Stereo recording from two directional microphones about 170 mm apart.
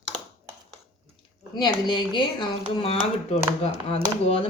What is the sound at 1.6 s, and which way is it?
Speech, 25° left (ahead or behind).